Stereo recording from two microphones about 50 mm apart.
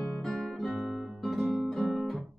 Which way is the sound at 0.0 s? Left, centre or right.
Centre.